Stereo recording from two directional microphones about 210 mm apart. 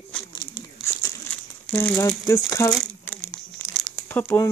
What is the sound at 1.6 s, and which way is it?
Speech, 5° left (ahead or behind).